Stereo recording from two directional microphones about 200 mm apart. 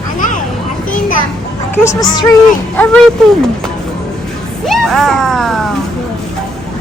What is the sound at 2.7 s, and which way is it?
Speech, 10° left (ahead or behind).